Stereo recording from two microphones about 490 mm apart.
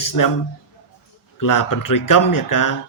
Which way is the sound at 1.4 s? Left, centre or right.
Left.